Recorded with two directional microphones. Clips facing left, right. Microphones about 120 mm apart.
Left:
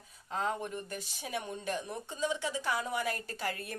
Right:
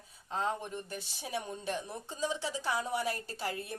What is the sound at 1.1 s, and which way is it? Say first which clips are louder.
Speech: right 1 dB; 35° right (ahead or behind).